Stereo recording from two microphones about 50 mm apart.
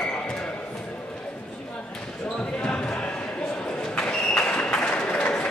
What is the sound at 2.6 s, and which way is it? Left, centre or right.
Basketball bounce, left.